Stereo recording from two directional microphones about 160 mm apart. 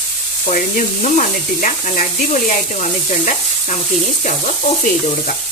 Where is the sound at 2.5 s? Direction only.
50° left (ahead or behind).